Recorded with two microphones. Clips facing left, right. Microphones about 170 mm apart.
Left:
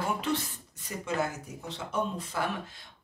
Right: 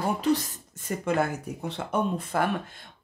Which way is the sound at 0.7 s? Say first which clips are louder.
Right 6 dB; 55° right (ahead or behind).